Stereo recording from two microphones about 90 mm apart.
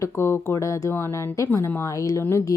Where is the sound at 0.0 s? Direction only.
30° left (ahead or behind).